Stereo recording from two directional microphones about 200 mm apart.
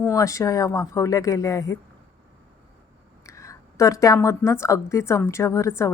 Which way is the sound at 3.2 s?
15° left (ahead or behind).